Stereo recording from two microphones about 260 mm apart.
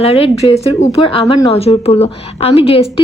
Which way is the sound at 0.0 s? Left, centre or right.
Left.